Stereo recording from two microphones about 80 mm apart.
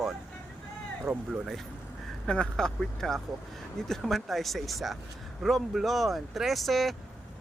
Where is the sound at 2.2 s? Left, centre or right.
Centre.